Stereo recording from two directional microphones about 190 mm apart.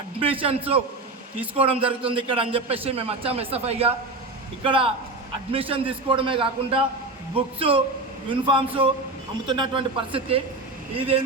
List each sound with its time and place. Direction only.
0.2 s a man's voice: 30° right (ahead or behind)